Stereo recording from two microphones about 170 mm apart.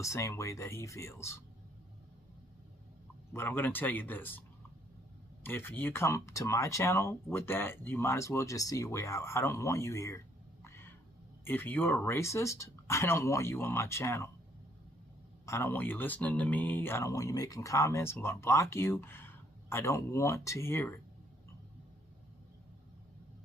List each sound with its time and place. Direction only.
0.0 s speech: 20° left (ahead or behind)
3.3 s speech: 15° left (ahead or behind)
10.6 s a sound: 15° left (ahead or behind)
11.4 s speech: 10° left (ahead or behind)
15.4 s speech: 15° left (ahead or behind)